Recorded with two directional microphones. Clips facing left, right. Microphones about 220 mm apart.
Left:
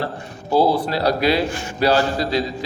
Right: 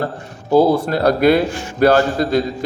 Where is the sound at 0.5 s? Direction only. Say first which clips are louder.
Right 4 dB; 45° right (ahead or behind).